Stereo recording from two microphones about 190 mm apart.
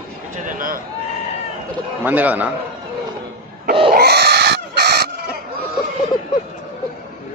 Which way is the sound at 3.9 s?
55° right (ahead or behind).